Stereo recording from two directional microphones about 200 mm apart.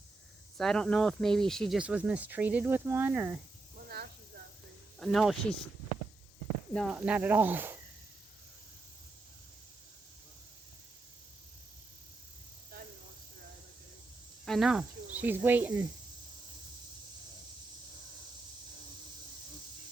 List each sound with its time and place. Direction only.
0.5 s speech: centre (ahead or behind)
3.8 s snake: 50° right (ahead or behind)
4.9 s speech: centre (ahead or behind)
6.9 s speech: 5° right (ahead or behind)
14.4 s speech: centre (ahead or behind)